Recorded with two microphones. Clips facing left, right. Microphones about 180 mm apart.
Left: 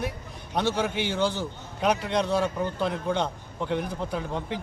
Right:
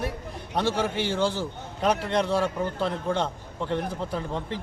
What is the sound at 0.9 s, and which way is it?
Speech, 30° right (ahead or behind).